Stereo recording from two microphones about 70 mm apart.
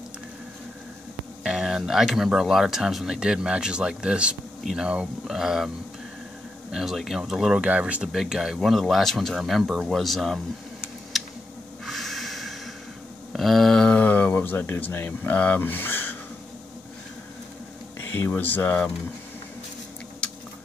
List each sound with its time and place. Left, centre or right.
1.4 s speech: centre
6.7 s speech: centre
8.1 s speech: centre
11.1 s a sound: centre
11.8 s snort: centre
13.3 s speech: centre; by 16.2 s left
18.1 s speech: left